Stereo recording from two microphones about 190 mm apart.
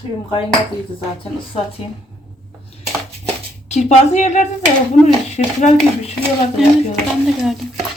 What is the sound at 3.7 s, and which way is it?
Speech, 35° left (ahead or behind).